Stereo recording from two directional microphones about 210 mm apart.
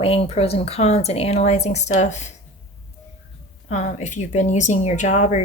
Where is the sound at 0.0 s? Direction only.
30° left (ahead or behind).